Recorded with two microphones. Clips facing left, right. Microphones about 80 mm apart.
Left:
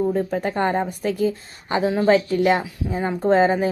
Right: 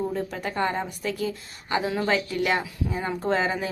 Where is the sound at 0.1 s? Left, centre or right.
Left.